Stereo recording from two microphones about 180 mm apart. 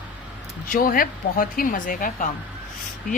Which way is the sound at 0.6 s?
50° left (ahead or behind).